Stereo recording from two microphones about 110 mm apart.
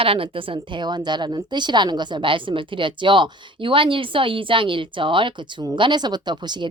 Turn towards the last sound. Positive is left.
turn(degrees=-45)  # may be behind; listen again after turning